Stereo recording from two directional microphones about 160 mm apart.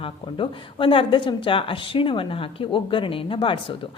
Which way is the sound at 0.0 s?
35° left (ahead or behind).